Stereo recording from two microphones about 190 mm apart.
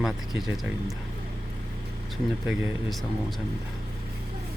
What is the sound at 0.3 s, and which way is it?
Speech, centre (ahead or behind).